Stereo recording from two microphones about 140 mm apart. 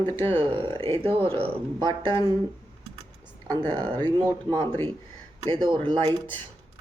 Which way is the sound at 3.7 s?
30° right (ahead or behind).